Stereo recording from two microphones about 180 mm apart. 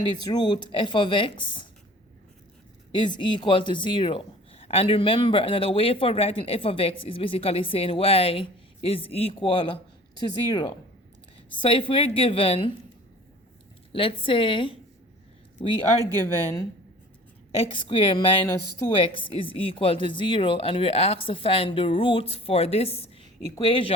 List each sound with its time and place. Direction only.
0.0 s speech: 25° left (ahead or behind)
2.9 s speech: 25° left (ahead or behind)
13.9 s speech: 30° left (ahead or behind)
17.6 s speech: 30° left (ahead or behind)